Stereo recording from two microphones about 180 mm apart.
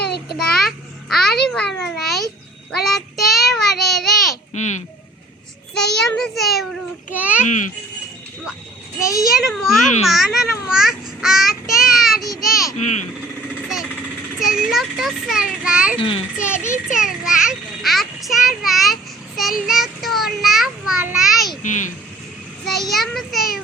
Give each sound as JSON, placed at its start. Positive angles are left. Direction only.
{"t": 0.3, "sound": "a child's voice", "side_deg": 5}
{"t": 4.5, "sound": "speech", "side_deg": 40}
{"t": 5.7, "sound": "a child's voice", "side_deg": 5}
{"t": 7.4, "sound": "speech", "side_deg": 45}
{"t": 9.0, "sound": "a child's voice", "side_deg": 20}
{"t": 9.3, "sound": "a child's voice", "side_deg": 0}
{"t": 11.8, "sound": "a sound", "side_deg": 0}
{"t": 12.4, "sound": "a child's voice", "side_deg": 0}
{"t": 12.7, "sound": "speech", "side_deg": 40}
{"t": 14.3, "sound": "a child's voice", "side_deg": 0}
{"t": 16.0, "sound": "a child's voice", "side_deg": 30}
{"t": 16.9, "sound": "a child's voice", "side_deg": -5}
{"t": 21.6, "sound": "speech", "side_deg": 45}
{"t": 22.6, "sound": "a child's voice", "side_deg": 0}